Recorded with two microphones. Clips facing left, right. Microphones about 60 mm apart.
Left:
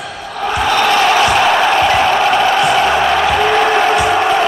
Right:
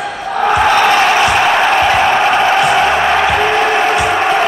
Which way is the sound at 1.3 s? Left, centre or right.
Centre.